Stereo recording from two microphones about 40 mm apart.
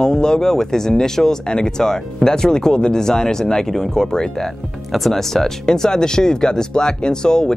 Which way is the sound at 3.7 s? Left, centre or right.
Centre.